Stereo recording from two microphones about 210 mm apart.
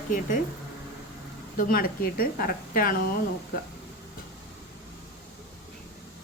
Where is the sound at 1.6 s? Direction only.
45° left (ahead or behind).